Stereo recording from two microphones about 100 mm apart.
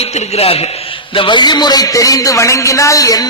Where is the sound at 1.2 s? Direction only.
50° left (ahead or behind).